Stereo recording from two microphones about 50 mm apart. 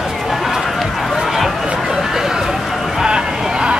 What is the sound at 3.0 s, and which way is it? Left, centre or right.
Vehicle, centre.